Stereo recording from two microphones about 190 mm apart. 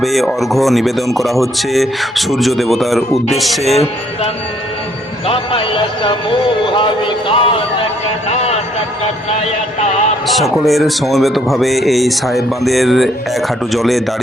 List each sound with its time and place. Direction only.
0.0 s speech: centre (ahead or behind)
5.2 s a sound: 30° left (ahead or behind)
10.2 s speech: centre (ahead or behind)